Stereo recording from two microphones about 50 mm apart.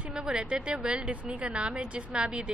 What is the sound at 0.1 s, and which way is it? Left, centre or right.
Speech, centre.